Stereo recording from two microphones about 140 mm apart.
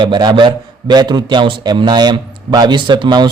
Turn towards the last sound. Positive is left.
turn(degrees=-35)  # may be behind; listen again after turning